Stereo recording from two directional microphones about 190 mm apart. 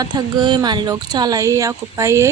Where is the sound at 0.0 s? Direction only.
20° right (ahead or behind).